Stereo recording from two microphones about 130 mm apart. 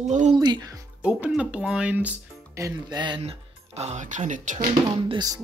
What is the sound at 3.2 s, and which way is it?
Speech, 55° right (ahead or behind).